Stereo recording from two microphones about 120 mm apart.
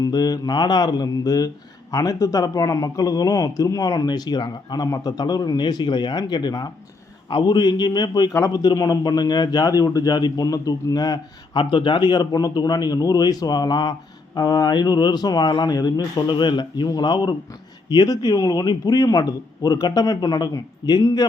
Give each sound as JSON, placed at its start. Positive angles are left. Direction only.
{"t": 0.0, "sound": "a man's voice", "side_deg": 35}